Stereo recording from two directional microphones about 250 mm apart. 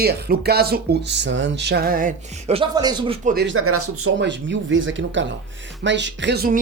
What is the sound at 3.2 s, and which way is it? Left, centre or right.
Speech, right.